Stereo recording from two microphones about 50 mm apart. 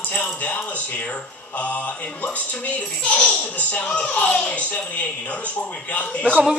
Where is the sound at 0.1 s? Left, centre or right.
Left.